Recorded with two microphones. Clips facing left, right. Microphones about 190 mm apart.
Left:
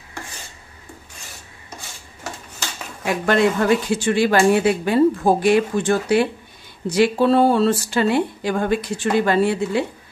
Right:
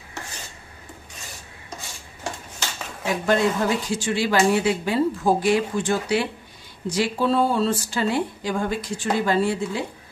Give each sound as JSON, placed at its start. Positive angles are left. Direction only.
{"t": 3.1, "sound": "speech", "side_deg": 70}